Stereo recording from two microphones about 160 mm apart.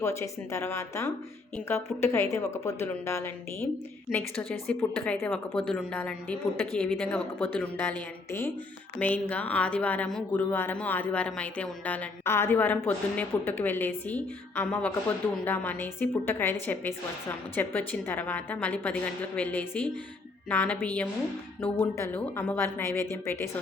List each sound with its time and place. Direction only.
0.0 s a woman's voice: 15° left (ahead or behind)
4.4 s a woman's voice: centre (ahead or behind)
4.8 s a woman's voice: 10° left (ahead or behind)